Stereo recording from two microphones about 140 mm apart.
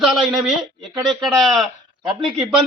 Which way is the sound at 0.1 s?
Centre (ahead or behind).